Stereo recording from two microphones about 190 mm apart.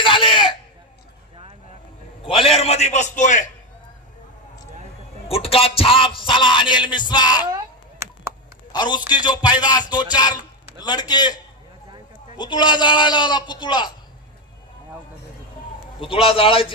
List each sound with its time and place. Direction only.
0.0 s chicken: 25° left (ahead or behind)
2.3 s a man's voice: 30° left (ahead or behind)
5.3 s music: 30° left (ahead or behind)
7.5 s a sound: 15° right (ahead or behind)
8.7 s a man's voice: 25° left (ahead or behind)
9.1 s music: 25° left (ahead or behind)
12.4 s music: 25° left (ahead or behind)
16.2 s music: 30° left (ahead or behind)